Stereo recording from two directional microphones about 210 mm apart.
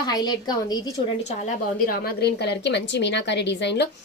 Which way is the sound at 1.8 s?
45° left (ahead or behind).